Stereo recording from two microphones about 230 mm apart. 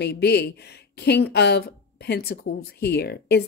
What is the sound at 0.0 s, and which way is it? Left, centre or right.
Speech, left.